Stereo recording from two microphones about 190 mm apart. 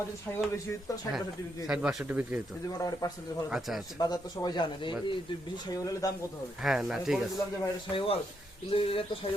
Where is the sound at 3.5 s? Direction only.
Centre (ahead or behind).